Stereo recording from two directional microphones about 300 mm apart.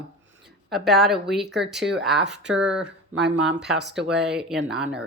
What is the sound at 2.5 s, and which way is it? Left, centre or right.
Speech, centre.